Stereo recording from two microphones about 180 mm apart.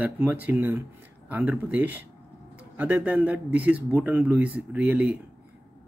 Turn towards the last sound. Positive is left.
turn(degrees=-10)  # may be behind; listen again after turning